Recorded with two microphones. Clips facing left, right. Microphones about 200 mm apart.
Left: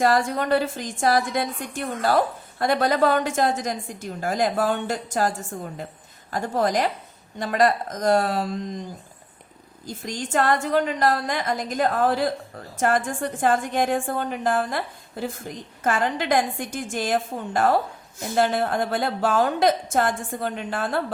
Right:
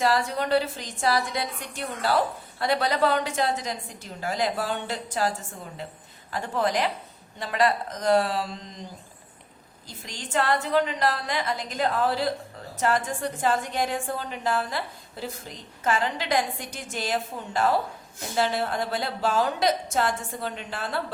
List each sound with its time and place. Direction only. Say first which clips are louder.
0.0 s a woman's voice: left 3 dB; 50° left (ahead or behind)
6.3 s a woman's voice: left 3 dB; 40° left (ahead or behind)
9.8 s a woman's voice: left 9 dB; 45° left (ahead or behind)